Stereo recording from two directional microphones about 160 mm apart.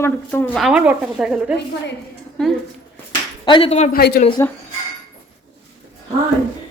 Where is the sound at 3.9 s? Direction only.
75° left (ahead or behind).